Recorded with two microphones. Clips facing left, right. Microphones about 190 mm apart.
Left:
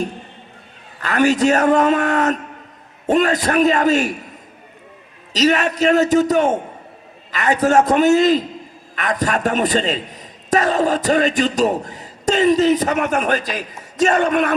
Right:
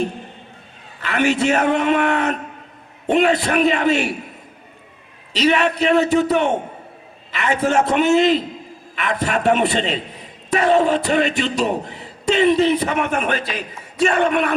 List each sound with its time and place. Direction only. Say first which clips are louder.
0.9 s a man's voice: left 3 dB; 40° left (ahead or behind)
5.3 s a man's voice: left 1 dB; 40° left (ahead or behind)